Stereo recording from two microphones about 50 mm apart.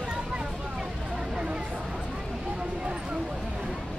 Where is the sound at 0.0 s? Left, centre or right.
Centre.